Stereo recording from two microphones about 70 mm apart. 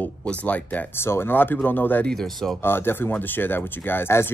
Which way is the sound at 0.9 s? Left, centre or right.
Left.